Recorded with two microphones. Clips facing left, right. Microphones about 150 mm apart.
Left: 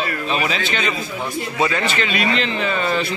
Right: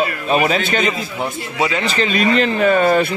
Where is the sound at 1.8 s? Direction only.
35° right (ahead or behind).